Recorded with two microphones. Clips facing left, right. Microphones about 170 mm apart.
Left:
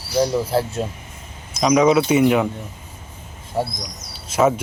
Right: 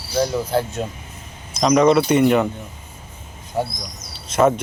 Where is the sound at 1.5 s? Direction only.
5° left (ahead or behind).